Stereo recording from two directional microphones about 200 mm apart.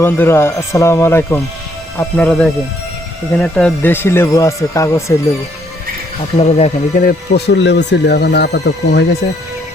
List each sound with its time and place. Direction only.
0.0 s speech: 10° left (ahead or behind)
6.3 s speech: 30° left (ahead or behind); by 9.0 s 55° left (ahead or behind)